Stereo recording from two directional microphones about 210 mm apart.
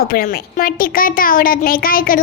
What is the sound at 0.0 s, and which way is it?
A child's voice, 45° left (ahead or behind).